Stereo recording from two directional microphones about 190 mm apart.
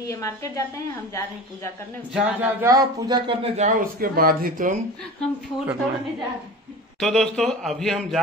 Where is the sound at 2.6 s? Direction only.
20° right (ahead or behind).